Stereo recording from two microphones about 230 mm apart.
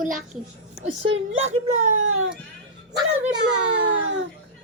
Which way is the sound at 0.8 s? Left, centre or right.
Right.